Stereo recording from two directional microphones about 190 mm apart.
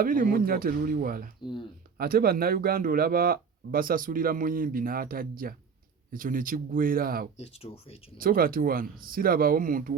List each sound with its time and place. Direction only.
0.0 s speech: 50° right (ahead or behind)
7.3 s speech: 35° left (ahead or behind)
8.2 s speech: 50° right (ahead or behind)